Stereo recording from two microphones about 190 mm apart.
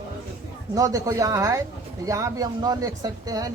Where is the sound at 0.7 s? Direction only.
20° right (ahead or behind).